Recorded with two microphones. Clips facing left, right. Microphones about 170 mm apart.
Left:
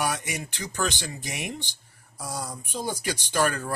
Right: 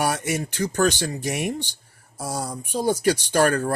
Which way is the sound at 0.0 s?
45° right (ahead or behind).